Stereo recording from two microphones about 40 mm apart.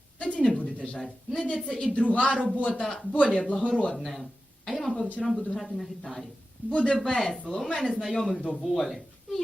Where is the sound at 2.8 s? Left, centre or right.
Centre.